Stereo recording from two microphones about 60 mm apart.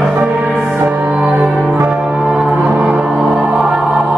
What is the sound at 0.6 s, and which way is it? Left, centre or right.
Music, right.